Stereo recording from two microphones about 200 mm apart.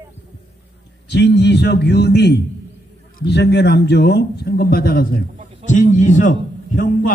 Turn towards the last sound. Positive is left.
turn(degrees=40)  # may be behind; listen again after turning